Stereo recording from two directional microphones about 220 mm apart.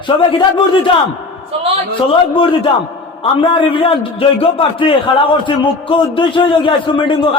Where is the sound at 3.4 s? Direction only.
25° left (ahead or behind).